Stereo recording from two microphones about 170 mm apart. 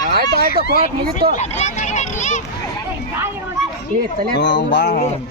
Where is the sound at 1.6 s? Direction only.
45° left (ahead or behind).